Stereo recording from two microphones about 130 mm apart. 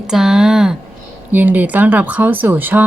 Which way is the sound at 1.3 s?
15° right (ahead or behind).